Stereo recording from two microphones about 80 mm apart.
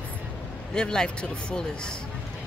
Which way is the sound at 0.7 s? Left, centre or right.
Centre.